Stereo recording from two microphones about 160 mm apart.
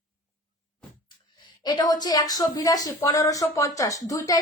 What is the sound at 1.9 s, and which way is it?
Speech, 25° left (ahead or behind).